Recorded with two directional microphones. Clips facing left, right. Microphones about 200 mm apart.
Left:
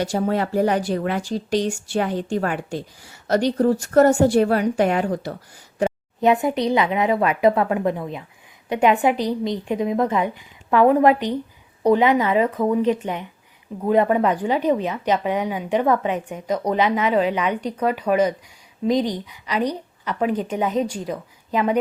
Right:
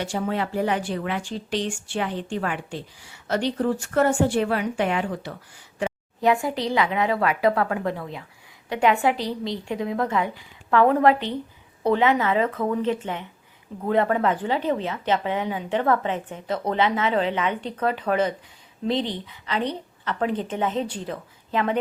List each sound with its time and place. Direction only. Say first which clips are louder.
0.0 s speech: left 5 dB; 40° left (ahead or behind)
6.1 s a woman's voice: left 4 dB; 20° left (ahead or behind)